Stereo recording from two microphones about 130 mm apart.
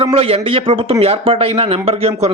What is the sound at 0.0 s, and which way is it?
A man's voice, 45° right (ahead or behind).